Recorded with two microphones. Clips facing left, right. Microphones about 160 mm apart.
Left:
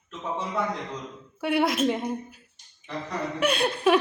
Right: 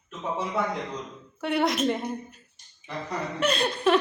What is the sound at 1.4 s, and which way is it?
A woman's voice, 5° left (ahead or behind).